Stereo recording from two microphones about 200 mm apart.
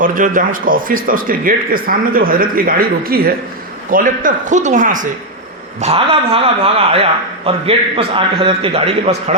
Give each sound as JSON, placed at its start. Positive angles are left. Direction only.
{"t": 0.0, "sound": "a man's voice", "side_deg": -40}
{"t": 5.8, "sound": "a man's voice", "side_deg": -30}